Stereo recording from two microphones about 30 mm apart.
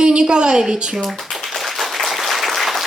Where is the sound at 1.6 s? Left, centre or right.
Centre.